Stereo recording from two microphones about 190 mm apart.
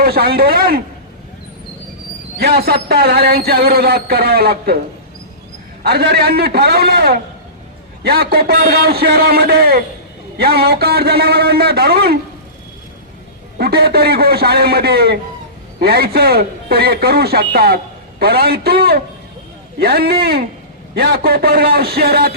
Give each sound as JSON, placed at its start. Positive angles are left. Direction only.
{"t": 0.0, "sound": "a man's voice", "side_deg": -55}
{"t": 2.4, "sound": "speech", "side_deg": -55}
{"t": 5.8, "sound": "speech", "side_deg": -55}
{"t": 13.6, "sound": "speech", "side_deg": -55}